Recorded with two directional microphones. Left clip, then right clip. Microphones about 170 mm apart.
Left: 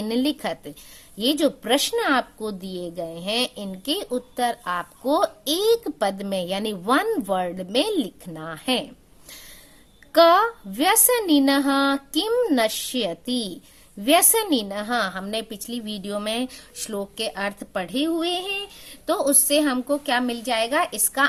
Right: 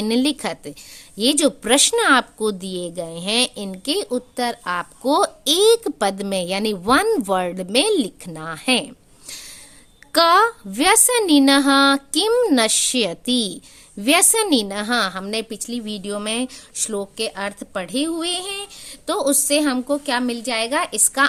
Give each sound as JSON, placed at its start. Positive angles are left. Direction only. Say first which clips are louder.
{"t": 0.0, "sound": "a woman's voice", "louder": "right 4 dB", "side_deg": -35}
{"t": 10.1, "sound": "a woman's voice", "louder": "right 1 dB", "side_deg": -45}